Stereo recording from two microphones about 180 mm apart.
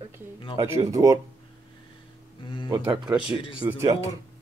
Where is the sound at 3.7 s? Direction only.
15° right (ahead or behind).